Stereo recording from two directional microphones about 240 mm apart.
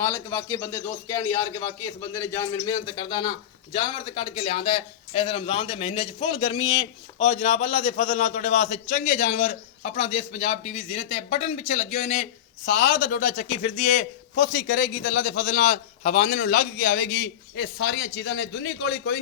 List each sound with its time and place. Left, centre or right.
0.0 s a man's voice: centre; by 19.2 s left